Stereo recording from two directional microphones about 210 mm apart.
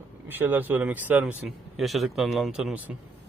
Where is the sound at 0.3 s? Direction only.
10° right (ahead or behind).